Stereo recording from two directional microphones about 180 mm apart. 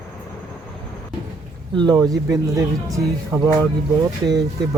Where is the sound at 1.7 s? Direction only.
25° right (ahead or behind).